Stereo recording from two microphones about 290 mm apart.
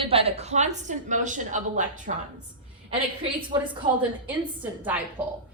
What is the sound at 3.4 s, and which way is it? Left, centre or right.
Speech, centre.